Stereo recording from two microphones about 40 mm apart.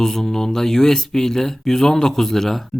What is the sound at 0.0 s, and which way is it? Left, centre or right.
Speech, centre.